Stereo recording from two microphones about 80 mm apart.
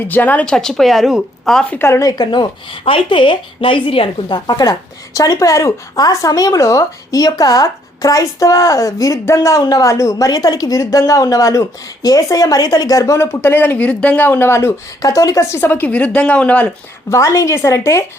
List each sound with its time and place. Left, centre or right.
0.1 s a woman's voice: left
0.4 s speech: centre
2.0 s speech: left
3.1 s speech: left
4.5 s a woman's voice: left
15.0 s a woman's voice: left
15.5 s a woman's voice: left
17.1 s speech: left